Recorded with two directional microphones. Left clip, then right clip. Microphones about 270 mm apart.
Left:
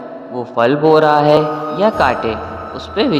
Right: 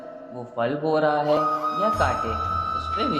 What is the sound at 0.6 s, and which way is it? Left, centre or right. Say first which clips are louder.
A man's voice: left 12 dB; left.